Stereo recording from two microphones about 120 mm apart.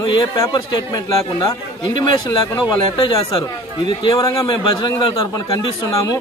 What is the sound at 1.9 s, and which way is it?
Speech, 40° left (ahead or behind).